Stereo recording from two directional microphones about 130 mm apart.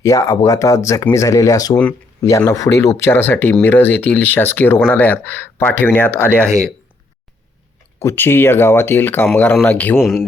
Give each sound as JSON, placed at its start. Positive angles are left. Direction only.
{"t": 0.0, "sound": "speech", "side_deg": 25}
{"t": 7.9, "sound": "speech", "side_deg": 20}
{"t": 10.0, "sound": "speech", "side_deg": 0}